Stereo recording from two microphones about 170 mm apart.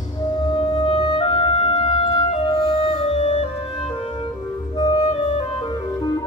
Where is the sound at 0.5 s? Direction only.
25° left (ahead or behind).